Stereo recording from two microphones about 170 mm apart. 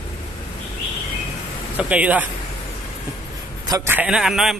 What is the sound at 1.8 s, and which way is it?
Speech, 10° right (ahead or behind).